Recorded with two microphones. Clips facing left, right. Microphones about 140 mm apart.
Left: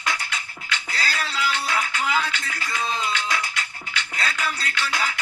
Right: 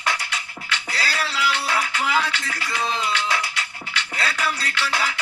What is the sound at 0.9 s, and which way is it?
Music, 35° right (ahead or behind).